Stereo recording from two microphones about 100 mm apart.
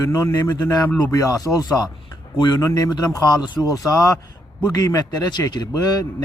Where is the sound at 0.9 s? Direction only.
15° left (ahead or behind).